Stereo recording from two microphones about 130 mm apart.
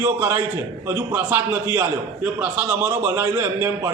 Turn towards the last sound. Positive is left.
turn(degrees=-15)  # may be behind; listen again after turning